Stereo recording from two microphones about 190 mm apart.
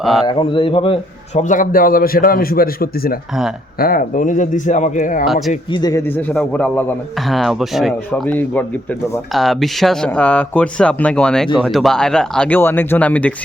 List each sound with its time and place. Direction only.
0.0 s a man's voice: centre (ahead or behind)
0.3 s a man's voice: 25° left (ahead or behind); by 5.2 s 45° left (ahead or behind)
5.7 s a man's voice: 20° left (ahead or behind)